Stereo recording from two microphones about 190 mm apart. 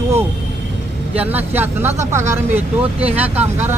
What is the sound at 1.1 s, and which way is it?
Speech, 10° right (ahead or behind).